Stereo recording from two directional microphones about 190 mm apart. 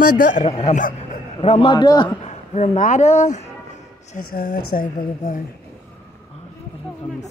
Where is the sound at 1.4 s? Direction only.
30° left (ahead or behind).